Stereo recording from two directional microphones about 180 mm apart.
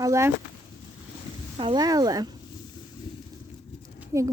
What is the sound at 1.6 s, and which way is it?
Speech, 25° right (ahead or behind).